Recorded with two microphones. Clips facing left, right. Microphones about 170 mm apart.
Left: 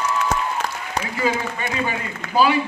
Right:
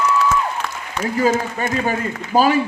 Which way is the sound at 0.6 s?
40° left (ahead or behind).